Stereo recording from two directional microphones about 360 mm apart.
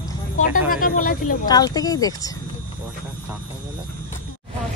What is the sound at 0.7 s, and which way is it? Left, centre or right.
Speech, left.